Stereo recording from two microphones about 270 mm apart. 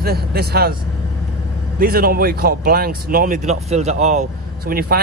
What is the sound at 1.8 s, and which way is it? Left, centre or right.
Speech, right.